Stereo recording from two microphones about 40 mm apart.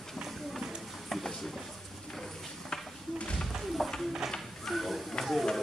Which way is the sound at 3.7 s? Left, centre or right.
Centre.